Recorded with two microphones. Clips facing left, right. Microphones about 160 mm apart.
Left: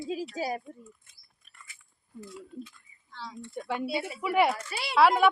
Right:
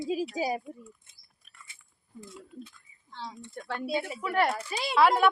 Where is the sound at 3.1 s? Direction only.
20° right (ahead or behind).